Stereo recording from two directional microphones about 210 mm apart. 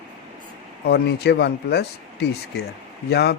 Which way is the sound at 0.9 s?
50° left (ahead or behind).